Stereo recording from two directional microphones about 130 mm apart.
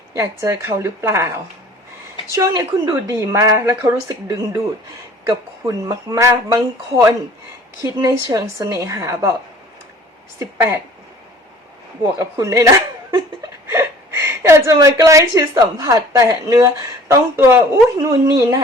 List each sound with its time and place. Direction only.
0.2 s a woman's voice: 25° right (ahead or behind)
12.4 s chuckle: 25° right (ahead or behind)
13.7 s a woman's voice: 20° right (ahead or behind)